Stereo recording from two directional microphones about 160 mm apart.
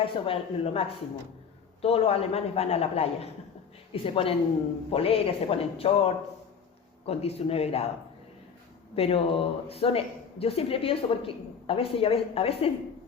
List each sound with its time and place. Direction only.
0.0 s speech: 35° left (ahead or behind)
9.0 s speech: 35° left (ahead or behind)